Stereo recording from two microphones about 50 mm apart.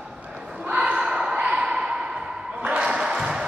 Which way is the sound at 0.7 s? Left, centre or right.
Right.